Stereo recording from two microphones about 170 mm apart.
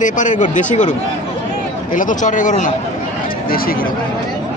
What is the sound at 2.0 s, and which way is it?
Speech, 50° left (ahead or behind).